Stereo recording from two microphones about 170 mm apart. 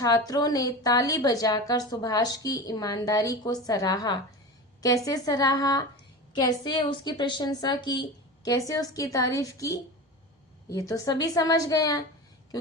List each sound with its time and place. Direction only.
0.3 s a woman's voice: 20° left (ahead or behind)